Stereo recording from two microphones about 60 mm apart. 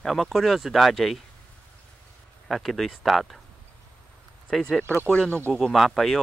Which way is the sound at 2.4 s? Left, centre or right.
Centre.